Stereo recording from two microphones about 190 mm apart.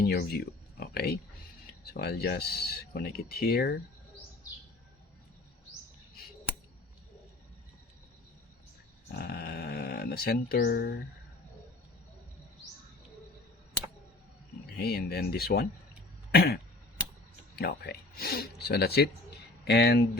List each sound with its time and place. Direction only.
0.0 s speech: 55° left (ahead or behind)
9.1 s speech: 55° left (ahead or behind)
14.8 s speech: 55° left (ahead or behind)
16.3 s cough: 55° left (ahead or behind)
17.6 s speech: 55° left (ahead or behind)